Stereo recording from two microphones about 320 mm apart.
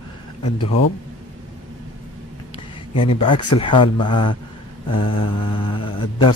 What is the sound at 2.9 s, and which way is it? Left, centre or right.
Speech, centre.